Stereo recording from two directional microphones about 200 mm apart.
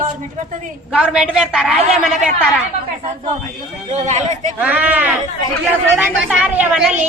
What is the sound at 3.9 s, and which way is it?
Speech, 35° right (ahead or behind).